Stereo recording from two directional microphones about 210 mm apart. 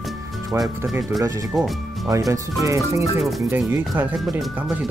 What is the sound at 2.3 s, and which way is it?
Speech, 15° right (ahead or behind).